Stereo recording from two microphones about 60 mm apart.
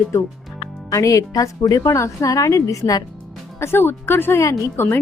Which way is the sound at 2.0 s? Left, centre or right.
Left.